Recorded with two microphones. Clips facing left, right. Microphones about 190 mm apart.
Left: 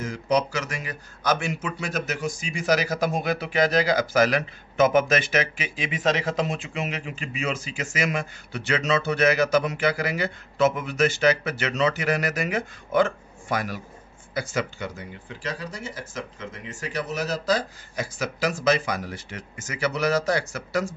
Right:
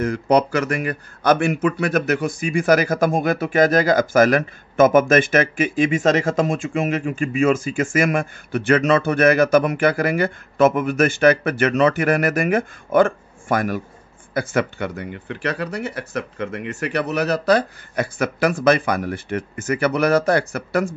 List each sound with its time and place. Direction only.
0.0 s speech: 60° right (ahead or behind)